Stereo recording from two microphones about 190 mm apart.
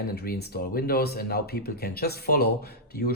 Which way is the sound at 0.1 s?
55° left (ahead or behind).